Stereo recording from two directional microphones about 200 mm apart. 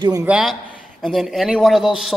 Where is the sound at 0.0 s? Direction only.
15° right (ahead or behind).